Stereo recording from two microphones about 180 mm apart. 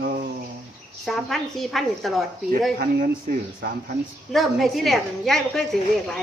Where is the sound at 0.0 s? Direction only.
55° right (ahead or behind).